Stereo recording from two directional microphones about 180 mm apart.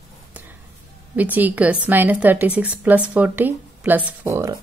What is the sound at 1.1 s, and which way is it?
A woman's voice, 10° right (ahead or behind).